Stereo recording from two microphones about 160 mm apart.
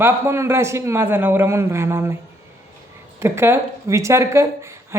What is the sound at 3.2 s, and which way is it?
Speech, 15° right (ahead or behind).